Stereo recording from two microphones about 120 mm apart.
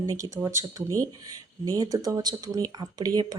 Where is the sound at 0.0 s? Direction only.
30° right (ahead or behind).